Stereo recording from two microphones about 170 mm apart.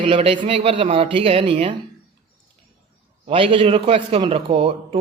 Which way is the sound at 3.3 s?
30° right (ahead or behind).